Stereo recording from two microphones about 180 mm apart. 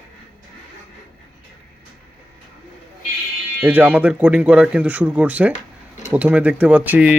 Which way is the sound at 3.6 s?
10° right (ahead or behind).